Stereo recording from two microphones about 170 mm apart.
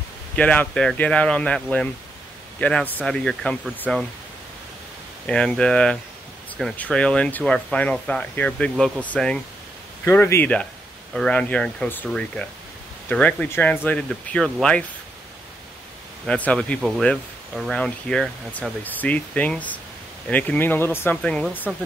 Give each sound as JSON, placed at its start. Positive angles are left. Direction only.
{"t": 0.4, "sound": "speech", "side_deg": 10}
{"t": 5.2, "sound": "speech", "side_deg": 5}
{"t": 16.3, "sound": "speech", "side_deg": 5}